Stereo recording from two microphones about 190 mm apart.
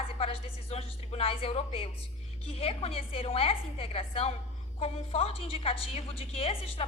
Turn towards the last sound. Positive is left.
turn(degrees=30)  # may be behind; listen again after turning